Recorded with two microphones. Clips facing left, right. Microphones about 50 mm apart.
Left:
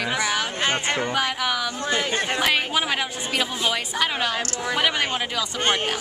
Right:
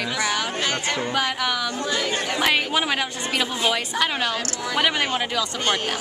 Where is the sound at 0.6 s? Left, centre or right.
Left.